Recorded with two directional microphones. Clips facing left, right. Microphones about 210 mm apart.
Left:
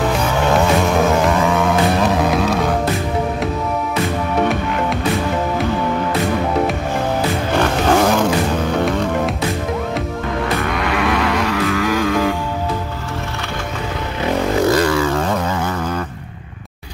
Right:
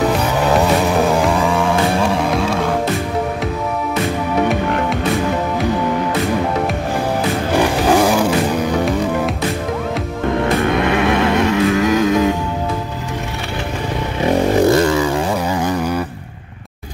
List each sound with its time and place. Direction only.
0.1 s music: centre (ahead or behind)
7.5 s music: 10° right (ahead or behind)
10.6 s vehicle: 25° right (ahead or behind)
14.2 s vehicle: 20° right (ahead or behind)